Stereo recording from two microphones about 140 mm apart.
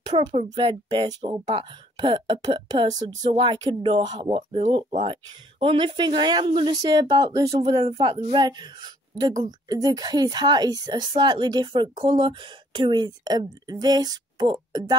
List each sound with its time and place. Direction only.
0.1 s a child's voice: 40° right (ahead or behind)
0.8 s speech: 30° right (ahead or behind)
1.4 s a woman's voice: 40° right (ahead or behind)
4.4 s a child's voice: 45° right (ahead or behind); by 7.7 s 30° right (ahead or behind)
7.7 s a woman's voice: 45° right (ahead or behind)